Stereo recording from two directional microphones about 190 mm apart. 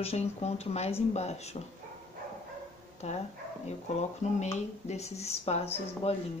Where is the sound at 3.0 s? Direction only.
35° left (ahead or behind).